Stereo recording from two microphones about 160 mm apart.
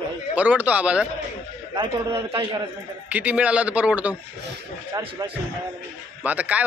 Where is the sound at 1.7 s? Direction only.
35° right (ahead or behind).